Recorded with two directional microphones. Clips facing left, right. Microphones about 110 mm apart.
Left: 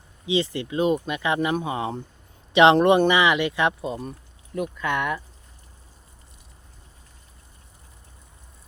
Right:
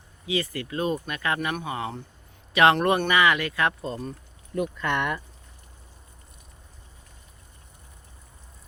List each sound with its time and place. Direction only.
0.3 s speech: 20° left (ahead or behind)
4.5 s speech: 5° left (ahead or behind)